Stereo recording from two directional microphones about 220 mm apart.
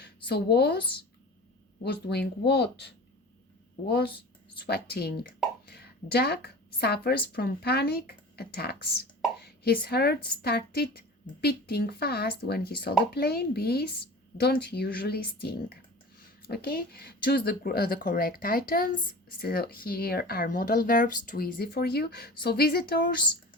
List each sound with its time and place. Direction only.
0.0 s a woman's voice: 45° left (ahead or behind)